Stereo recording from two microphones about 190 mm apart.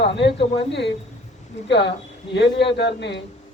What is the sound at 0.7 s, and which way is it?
A man's voice, 65° left (ahead or behind).